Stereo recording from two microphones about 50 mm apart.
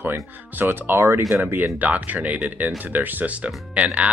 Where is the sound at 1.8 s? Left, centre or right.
Right.